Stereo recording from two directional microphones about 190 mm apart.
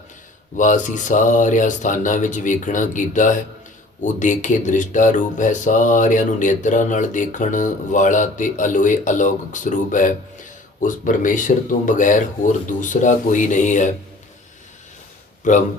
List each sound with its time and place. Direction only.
0.5 s speech: 40° left (ahead or behind)
15.5 s speech: 40° left (ahead or behind)